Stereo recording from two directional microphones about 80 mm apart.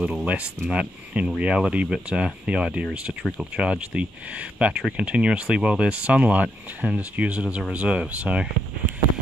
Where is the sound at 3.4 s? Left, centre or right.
Centre.